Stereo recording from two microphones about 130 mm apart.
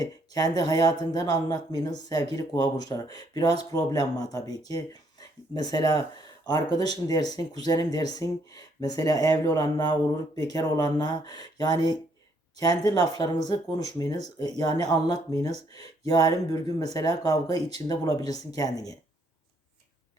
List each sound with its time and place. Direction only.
0.0 s speech: 30° left (ahead or behind)